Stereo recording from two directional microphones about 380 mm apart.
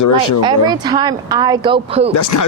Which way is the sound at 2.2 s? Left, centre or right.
Left.